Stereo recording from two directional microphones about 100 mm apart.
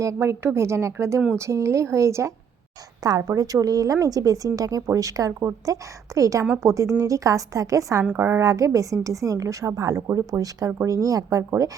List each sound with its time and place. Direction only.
0.0 s a woman's voice: 30° right (ahead or behind)
8.0 s a woman's voice: 20° right (ahead or behind)